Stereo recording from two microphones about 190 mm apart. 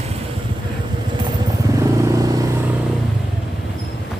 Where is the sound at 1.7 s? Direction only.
15° right (ahead or behind).